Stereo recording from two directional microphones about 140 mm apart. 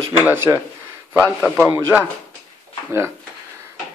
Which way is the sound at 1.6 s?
15° right (ahead or behind).